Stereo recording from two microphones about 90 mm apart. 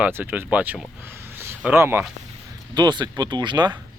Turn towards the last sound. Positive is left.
turn(degrees=-55)  # may be behind; listen again after turning